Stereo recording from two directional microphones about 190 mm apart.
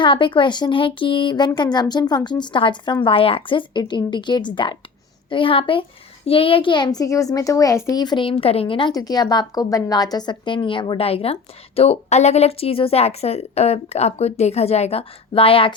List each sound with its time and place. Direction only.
0.0 s a child's voice: 25° left (ahead or behind)